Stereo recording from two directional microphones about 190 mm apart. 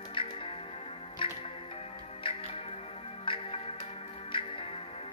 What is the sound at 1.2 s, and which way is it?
Music, 25° left (ahead or behind).